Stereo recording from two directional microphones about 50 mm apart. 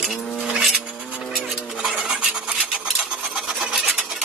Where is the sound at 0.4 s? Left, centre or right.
Centre.